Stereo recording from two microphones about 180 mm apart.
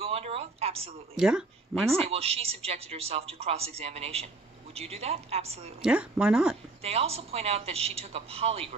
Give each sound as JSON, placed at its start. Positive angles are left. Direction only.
{"t": 0.0, "sound": "a sound", "side_deg": -30}
{"t": 1.1, "sound": "speech", "side_deg": -5}
{"t": 2.0, "sound": "a woman's voice", "side_deg": -35}
{"t": 5.8, "sound": "speech", "side_deg": -5}
{"t": 6.8, "sound": "a woman's voice", "side_deg": -35}